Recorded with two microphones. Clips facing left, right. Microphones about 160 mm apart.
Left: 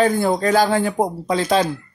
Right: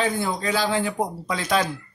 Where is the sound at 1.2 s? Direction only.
30° left (ahead or behind).